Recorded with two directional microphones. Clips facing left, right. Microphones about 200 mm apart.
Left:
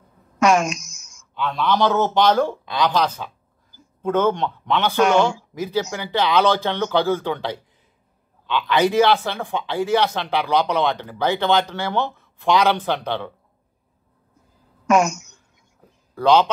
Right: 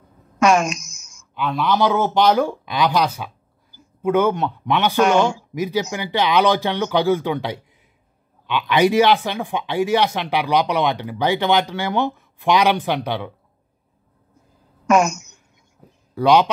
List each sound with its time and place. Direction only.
0.4 s speech: 65° right (ahead or behind)
1.3 s speech: 10° right (ahead or behind)
14.9 s speech: 65° right (ahead or behind)
16.2 s speech: 15° right (ahead or behind)